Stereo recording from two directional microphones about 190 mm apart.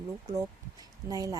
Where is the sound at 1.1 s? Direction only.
20° right (ahead or behind).